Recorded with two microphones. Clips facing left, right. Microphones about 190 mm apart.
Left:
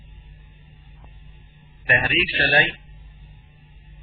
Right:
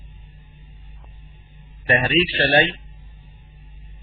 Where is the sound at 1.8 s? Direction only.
30° right (ahead or behind).